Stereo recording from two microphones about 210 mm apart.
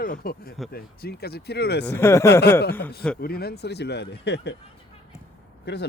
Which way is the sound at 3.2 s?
45° left (ahead or behind).